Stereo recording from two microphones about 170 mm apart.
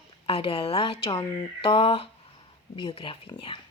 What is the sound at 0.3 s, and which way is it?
A woman's voice, 35° left (ahead or behind).